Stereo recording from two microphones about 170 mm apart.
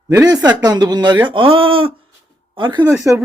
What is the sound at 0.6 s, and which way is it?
Speech, 25° right (ahead or behind).